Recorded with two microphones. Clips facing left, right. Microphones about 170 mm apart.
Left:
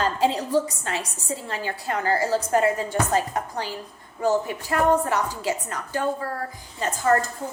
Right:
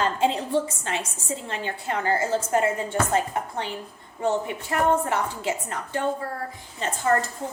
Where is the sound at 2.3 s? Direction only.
25° right (ahead or behind).